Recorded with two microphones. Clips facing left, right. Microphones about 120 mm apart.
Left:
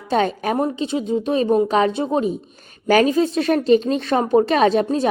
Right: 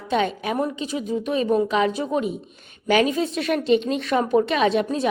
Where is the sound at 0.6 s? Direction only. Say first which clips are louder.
Left 3 dB; 30° left (ahead or behind).